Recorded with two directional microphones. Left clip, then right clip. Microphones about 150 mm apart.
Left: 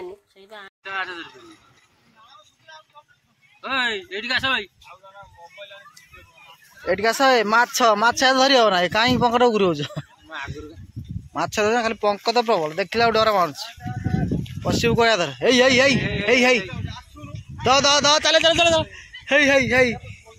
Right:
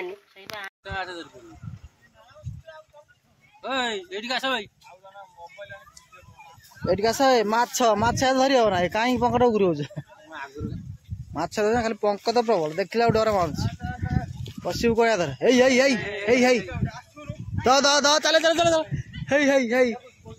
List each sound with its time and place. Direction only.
0.8 s speech: 25° right (ahead or behind)
3.6 s a man's voice: 25° right (ahead or behind)
6.9 s speech: 20° right (ahead or behind)
12.1 s a man's voice: 20° right (ahead or behind)
14.7 s a man's voice: 10° right (ahead or behind)
17.6 s a man's voice: 30° right (ahead or behind); by 20.0 s 10° right (ahead or behind)